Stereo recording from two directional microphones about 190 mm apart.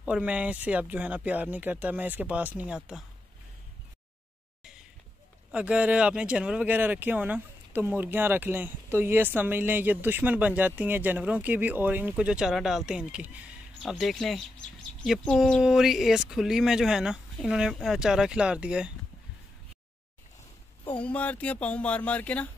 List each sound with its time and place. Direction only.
0.0 s speech: 5° right (ahead or behind)
5.5 s speech: 5° right (ahead or behind)
20.9 s speech: 5° left (ahead or behind)